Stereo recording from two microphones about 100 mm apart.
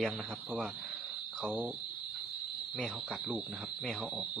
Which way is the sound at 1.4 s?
15° right (ahead or behind).